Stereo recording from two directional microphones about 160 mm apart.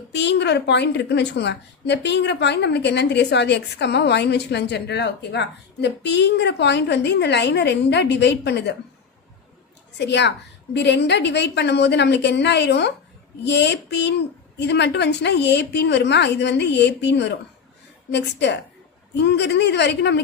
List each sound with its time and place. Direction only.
0.1 s a woman's voice: 90° left
10.0 s a woman's voice: 90° left